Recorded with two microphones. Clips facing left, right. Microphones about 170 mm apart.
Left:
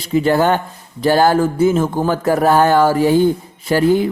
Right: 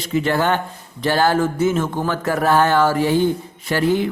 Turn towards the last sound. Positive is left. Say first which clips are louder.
# left 4 dB
turn(degrees=40)  # may be behind; listen again after turning